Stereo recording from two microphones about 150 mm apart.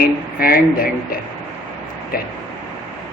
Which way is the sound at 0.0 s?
75° left (ahead or behind).